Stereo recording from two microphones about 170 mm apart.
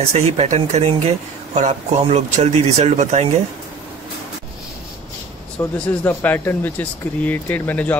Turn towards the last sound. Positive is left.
turn(degrees=10)  # may be behind; listen again after turning